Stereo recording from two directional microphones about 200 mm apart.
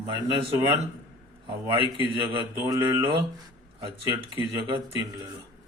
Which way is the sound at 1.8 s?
25° right (ahead or behind).